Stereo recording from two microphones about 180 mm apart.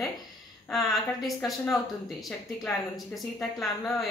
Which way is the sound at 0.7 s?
Centre (ahead or behind).